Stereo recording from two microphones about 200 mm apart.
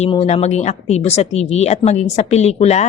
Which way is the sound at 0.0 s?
35° left (ahead or behind).